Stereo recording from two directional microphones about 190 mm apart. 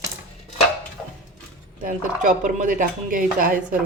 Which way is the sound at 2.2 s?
40° right (ahead or behind).